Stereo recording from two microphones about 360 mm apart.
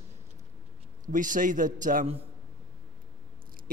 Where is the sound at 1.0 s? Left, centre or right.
Right.